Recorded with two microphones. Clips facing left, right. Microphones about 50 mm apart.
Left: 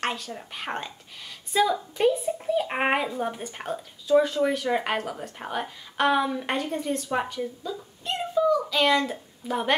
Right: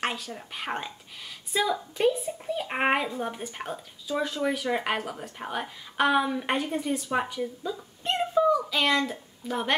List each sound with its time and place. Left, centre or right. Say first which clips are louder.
0.0 s a child's voice: left 1 dB; centre
8.0 s a sound: right 1 dB; right
8.5 s a child's voice: left 3 dB; centre